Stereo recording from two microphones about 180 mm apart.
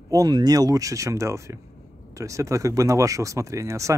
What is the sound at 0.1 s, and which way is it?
Speech, 20° right (ahead or behind).